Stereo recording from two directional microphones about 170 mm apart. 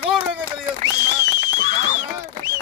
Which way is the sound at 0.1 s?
5° right (ahead or behind).